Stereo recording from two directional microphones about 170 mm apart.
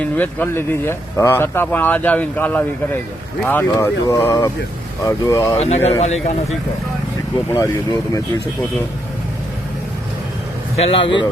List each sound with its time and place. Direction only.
0.0 s speech: 10° left (ahead or behind)
5.5 s speech: 40° left (ahead or behind)
7.5 s speech: 20° left (ahead or behind)
10.8 s speech: 35° left (ahead or behind)